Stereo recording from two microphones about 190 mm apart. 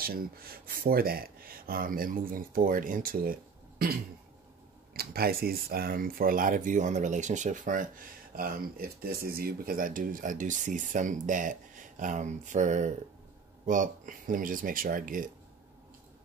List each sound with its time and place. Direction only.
0.0 s speech: 50° right (ahead or behind)